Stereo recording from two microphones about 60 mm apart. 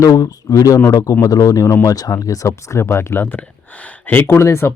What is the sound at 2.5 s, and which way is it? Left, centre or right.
Speech, left.